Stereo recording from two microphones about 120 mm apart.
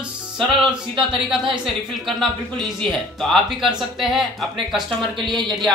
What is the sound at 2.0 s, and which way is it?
Speech, centre (ahead or behind).